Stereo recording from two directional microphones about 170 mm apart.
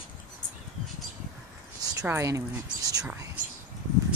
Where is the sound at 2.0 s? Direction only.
15° right (ahead or behind).